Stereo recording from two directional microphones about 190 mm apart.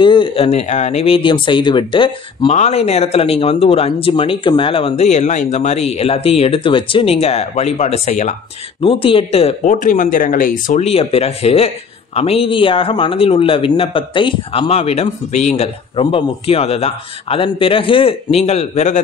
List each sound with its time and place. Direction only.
0.0 s speech: 25° left (ahead or behind)